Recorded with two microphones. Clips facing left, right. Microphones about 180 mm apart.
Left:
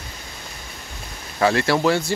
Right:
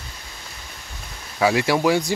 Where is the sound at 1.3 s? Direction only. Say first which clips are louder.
Even; 10° right (ahead or behind).